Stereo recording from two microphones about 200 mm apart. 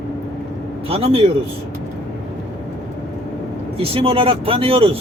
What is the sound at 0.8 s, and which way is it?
Speech, 30° right (ahead or behind).